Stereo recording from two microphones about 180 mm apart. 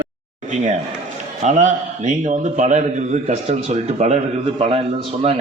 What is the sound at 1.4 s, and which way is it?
A man's voice, 40° right (ahead or behind).